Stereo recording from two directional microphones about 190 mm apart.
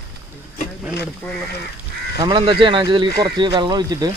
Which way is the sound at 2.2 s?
25° right (ahead or behind).